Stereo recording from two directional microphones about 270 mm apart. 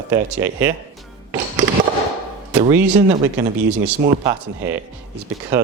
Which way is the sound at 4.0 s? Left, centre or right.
Centre.